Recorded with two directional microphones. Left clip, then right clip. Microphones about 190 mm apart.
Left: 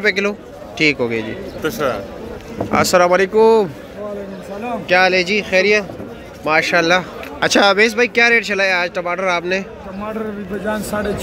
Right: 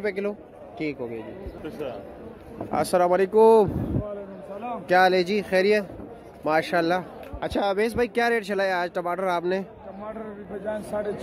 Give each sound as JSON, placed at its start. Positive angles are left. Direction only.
{"t": 0.0, "sound": "a man's voice", "side_deg": -15}
{"t": 0.8, "sound": "a man's voice", "side_deg": 5}
{"t": 1.6, "sound": "speech", "side_deg": 25}
{"t": 2.7, "sound": "speech", "side_deg": -15}
{"t": 4.8, "sound": "speech", "side_deg": -30}
{"t": 7.3, "sound": "speech", "side_deg": -5}
{"t": 7.8, "sound": "speech", "side_deg": -25}
{"t": 10.7, "sound": "a man's voice", "side_deg": 55}